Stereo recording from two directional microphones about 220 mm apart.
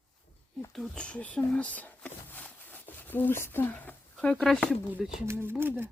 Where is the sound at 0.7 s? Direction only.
5° left (ahead or behind).